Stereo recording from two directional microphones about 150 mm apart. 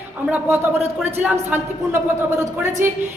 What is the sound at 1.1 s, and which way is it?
A woman's voice, 15° right (ahead or behind).